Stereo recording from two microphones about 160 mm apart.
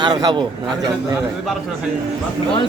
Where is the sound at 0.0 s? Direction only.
25° right (ahead or behind).